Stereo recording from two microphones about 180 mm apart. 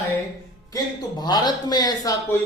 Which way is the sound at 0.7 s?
25° left (ahead or behind).